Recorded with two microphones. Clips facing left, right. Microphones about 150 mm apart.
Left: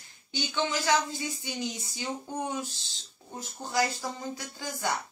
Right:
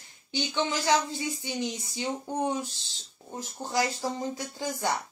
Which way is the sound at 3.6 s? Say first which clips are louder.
Even; 25° right (ahead or behind).